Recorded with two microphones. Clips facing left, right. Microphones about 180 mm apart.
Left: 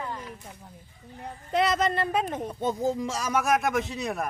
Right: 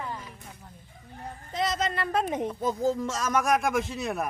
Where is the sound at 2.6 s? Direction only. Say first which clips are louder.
Left 1 dB; 15° left (ahead or behind); by 4.2 s centre (ahead or behind).